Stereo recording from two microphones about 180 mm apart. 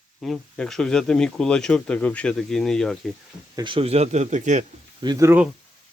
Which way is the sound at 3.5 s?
30° right (ahead or behind).